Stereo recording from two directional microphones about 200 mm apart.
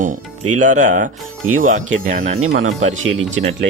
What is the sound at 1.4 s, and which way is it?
Speech, 90° right.